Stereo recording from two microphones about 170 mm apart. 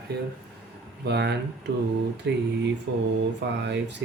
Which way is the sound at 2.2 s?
90° right.